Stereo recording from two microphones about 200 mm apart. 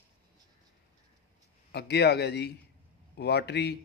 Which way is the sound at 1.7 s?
55° left (ahead or behind).